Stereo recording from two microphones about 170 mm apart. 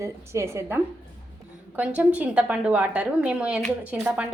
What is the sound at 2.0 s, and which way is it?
A woman's voice, 5° right (ahead or behind).